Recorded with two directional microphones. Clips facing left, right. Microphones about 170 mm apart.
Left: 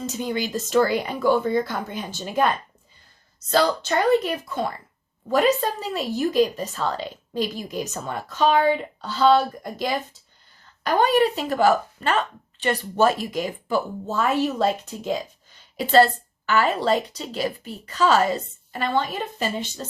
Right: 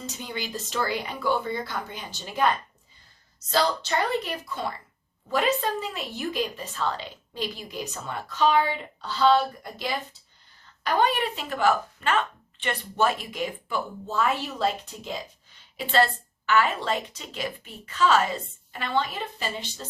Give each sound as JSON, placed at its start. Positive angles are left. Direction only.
{"t": 0.0, "sound": "a woman's voice", "side_deg": 45}
{"t": 5.3, "sound": "a woman's voice", "side_deg": 40}